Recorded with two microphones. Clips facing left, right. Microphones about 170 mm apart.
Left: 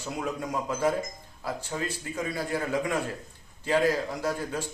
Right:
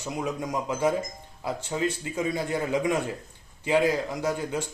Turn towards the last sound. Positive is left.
turn(degrees=-20)  # may be behind; listen again after turning